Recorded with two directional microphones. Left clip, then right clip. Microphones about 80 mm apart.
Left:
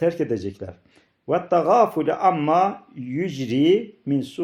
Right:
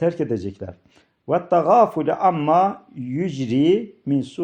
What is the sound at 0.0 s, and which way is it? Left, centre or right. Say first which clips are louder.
Speech: even; right.